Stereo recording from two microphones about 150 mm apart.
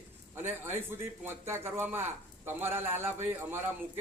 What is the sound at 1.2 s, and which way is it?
A man's voice, 15° right (ahead or behind).